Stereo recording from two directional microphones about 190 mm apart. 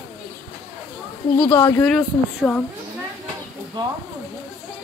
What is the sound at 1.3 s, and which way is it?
Speech, 20° left (ahead or behind).